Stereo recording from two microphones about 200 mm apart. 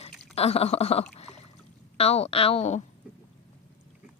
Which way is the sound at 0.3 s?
30° left (ahead or behind).